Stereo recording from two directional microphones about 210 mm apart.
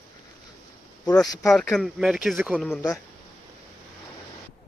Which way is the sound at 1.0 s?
5° left (ahead or behind).